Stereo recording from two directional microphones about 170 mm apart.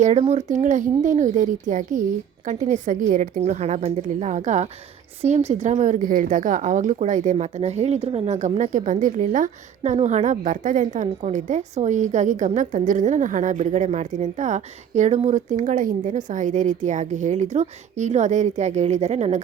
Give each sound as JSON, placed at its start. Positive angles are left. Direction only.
{"t": 0.0, "sound": "a woman's voice", "side_deg": -40}